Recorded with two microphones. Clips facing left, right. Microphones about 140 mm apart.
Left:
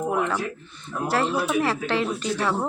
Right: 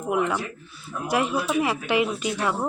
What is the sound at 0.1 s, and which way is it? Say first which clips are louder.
Speech: even; 10° right (ahead or behind).